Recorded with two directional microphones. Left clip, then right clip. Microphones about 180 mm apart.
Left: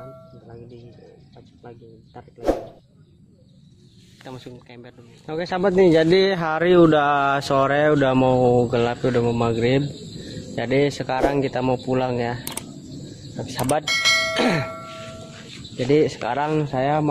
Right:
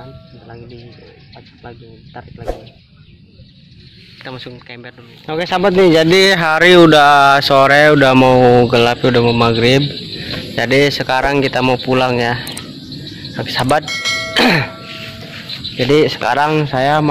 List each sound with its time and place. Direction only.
1.6 s speech: 20° right (ahead or behind)
4.2 s speech: 5° right (ahead or behind)
6.3 s speech: 5° right (ahead or behind)
10.5 s speech: 5° right (ahead or behind)
13.8 s doorbell: centre (ahead or behind)
14.3 s a sound: 10° right (ahead or behind)
14.7 s a sound: centre (ahead or behind)